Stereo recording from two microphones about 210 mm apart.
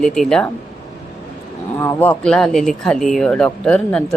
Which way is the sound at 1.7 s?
10° left (ahead or behind).